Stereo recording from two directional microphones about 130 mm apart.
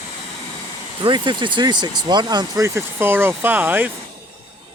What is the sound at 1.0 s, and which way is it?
Speech, 35° right (ahead or behind).